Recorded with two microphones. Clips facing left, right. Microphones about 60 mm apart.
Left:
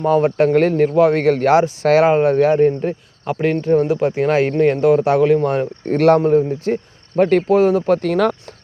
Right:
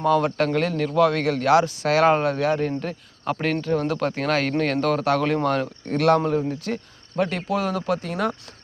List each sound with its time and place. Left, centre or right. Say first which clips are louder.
0.0 s speech: left 6 dB; left
0.5 s speech: left 8 dB; left
3.3 s speech: left 3 dB; centre
3.6 s speech: left 8 dB; left; by 5.5 s centre
5.9 s speech: left 7 dB; left
7.2 s speech: left 11 dB; left
7.9 s speech: left 9 dB; left